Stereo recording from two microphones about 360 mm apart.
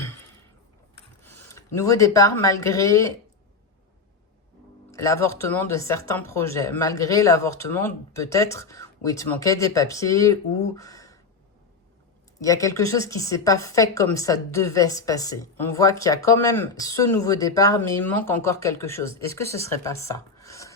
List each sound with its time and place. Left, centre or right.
1.2 s speech: centre
4.9 s speech: centre
12.4 s speech: centre